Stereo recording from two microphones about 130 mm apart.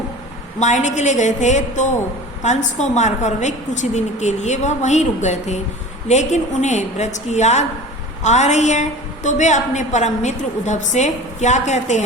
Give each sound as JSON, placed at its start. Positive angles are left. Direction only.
{"t": 0.6, "sound": "a woman's voice", "side_deg": 65}